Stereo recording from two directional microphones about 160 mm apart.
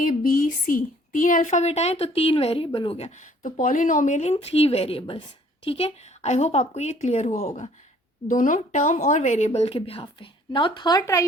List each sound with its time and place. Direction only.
0.0 s a woman's voice: 60° left (ahead or behind); by 11.3 s 20° left (ahead or behind)